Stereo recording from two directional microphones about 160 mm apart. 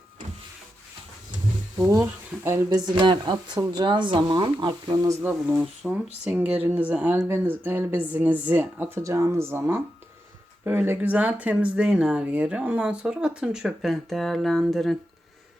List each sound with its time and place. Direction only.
1.8 s speech: 15° right (ahead or behind)
5.2 s speech: 10° right (ahead or behind)